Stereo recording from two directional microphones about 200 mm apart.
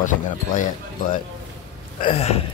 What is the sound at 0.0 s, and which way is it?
Speech, 40° left (ahead or behind).